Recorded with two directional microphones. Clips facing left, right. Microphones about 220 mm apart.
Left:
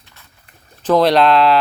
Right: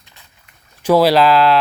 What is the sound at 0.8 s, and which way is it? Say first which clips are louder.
Speech: right 1 dB; 10° right (ahead or behind).